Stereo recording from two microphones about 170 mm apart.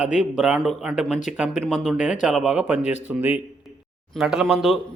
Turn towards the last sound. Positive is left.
turn(degrees=0)  # may be behind; listen again after turning